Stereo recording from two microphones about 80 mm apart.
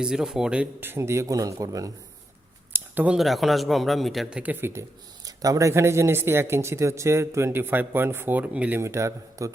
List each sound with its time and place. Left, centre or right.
0.0 s speech: centre
0.8 s speech: right
2.7 s a sound: right
3.2 s a man's voice: centre
4.3 s speech: centre
4.6 s speech: right; by 8.8 s centre
8.8 s speech: right